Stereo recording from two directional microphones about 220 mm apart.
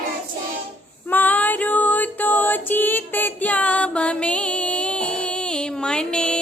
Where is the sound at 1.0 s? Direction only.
10° left (ahead or behind).